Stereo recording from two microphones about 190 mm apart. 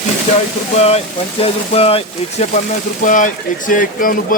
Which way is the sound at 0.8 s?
35° left (ahead or behind).